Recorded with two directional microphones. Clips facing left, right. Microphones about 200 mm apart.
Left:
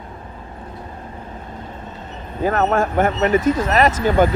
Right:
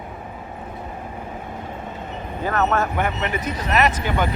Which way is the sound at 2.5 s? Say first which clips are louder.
Left 3 dB; 45° left (ahead or behind).